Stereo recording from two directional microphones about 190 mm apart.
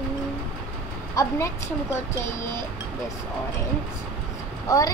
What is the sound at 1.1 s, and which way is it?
Speech, 15° left (ahead or behind).